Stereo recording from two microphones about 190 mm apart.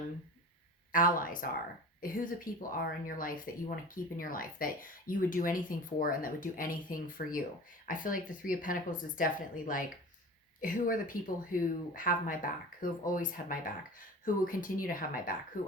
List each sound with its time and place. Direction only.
0.9 s speech: 45° left (ahead or behind)